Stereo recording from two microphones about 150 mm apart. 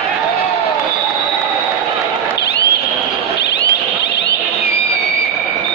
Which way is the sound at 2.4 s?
90° left.